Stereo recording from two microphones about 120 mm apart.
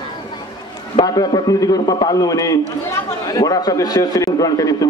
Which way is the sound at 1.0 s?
35° left (ahead or behind).